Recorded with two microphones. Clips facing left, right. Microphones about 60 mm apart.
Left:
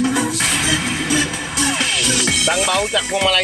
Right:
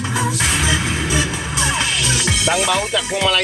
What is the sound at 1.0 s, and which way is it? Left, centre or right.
Music, left.